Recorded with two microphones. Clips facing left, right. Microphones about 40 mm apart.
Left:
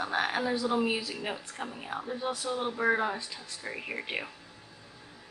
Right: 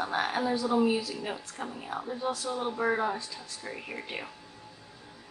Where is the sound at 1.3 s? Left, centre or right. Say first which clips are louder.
Even; centre.